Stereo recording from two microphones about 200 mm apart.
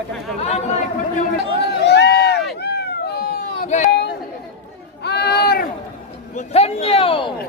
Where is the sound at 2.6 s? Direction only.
55° left (ahead or behind).